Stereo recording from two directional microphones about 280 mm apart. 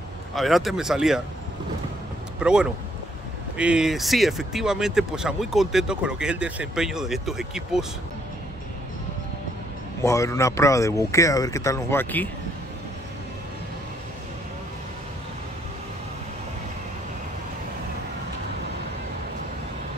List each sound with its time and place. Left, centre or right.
0.3 s speech: centre
2.4 s speech: centre
10.0 s speech: centre